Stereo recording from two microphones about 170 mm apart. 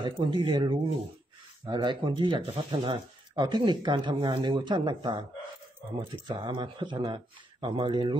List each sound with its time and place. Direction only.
0.0 s speech: 30° right (ahead or behind)
6.2 s speech: 25° right (ahead or behind)